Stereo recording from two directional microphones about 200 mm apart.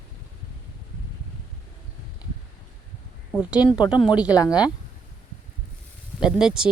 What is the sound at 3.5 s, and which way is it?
Speech, 5° right (ahead or behind).